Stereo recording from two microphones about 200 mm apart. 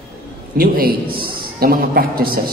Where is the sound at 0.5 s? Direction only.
45° right (ahead or behind).